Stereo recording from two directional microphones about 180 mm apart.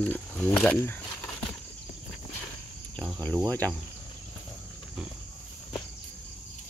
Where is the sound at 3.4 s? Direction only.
10° left (ahead or behind).